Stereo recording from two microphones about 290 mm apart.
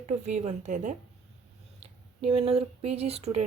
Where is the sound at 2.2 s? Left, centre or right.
Centre.